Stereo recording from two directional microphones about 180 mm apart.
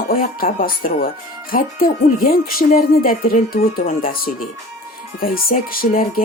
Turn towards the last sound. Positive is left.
turn(degrees=55)  # may be behind; listen again after turning